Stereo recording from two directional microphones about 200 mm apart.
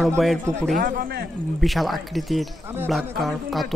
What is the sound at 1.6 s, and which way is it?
Speech, centre (ahead or behind).